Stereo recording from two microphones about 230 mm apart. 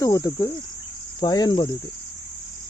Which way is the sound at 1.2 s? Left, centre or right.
Centre.